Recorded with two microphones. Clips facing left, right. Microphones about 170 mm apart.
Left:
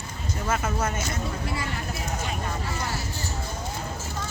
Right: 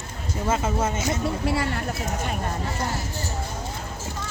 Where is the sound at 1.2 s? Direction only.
70° right (ahead or behind).